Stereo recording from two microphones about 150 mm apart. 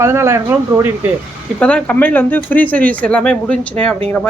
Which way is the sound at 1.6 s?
5° left (ahead or behind).